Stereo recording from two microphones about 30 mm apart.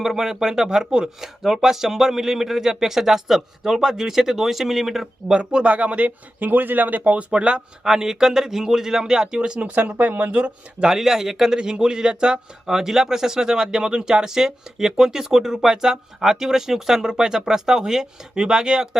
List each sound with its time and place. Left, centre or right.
0.0 s speech: centre
5.3 s speech: right
5.7 s speech: right
7.3 s speech: right
7.9 s speech: centre
9.6 s speech: right
10.9 s speech: centre
11.5 s speech: right
12.6 s speech: centre